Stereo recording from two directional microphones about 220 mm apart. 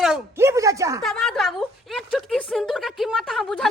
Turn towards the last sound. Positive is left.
turn(degrees=0)  # may be behind; listen again after turning